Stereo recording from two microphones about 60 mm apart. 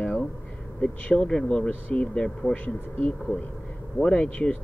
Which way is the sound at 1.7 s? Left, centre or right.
Left.